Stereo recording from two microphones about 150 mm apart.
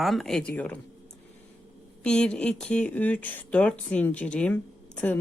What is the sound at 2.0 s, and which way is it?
Speech, 5° left (ahead or behind).